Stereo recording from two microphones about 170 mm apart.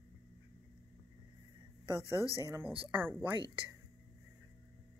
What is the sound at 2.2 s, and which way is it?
Speech, 20° left (ahead or behind).